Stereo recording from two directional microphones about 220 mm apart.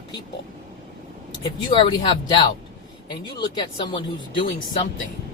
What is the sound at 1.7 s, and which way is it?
Speech, 25° left (ahead or behind).